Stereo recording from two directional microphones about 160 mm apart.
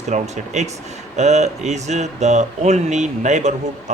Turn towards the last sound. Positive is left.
turn(degrees=-45)  # may be behind; listen again after turning